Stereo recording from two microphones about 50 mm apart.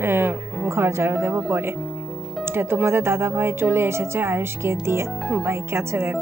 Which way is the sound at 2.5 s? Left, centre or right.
Right.